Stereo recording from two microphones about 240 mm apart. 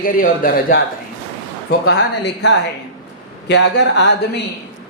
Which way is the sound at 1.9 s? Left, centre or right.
Left.